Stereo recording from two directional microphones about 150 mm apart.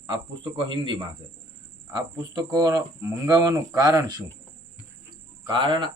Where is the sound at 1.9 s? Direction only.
25° right (ahead or behind).